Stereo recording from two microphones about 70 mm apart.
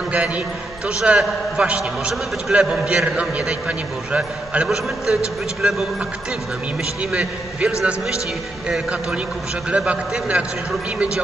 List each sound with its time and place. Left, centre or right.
0.8 s a man's voice: centre
7.0 s a man's voice: centre